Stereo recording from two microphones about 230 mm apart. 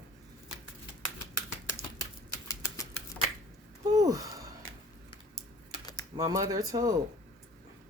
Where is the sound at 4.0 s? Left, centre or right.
Centre.